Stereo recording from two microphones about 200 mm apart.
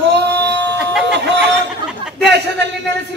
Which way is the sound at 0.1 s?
55° right (ahead or behind).